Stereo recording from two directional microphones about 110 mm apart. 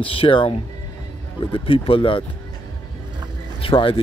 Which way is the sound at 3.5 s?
55° left (ahead or behind).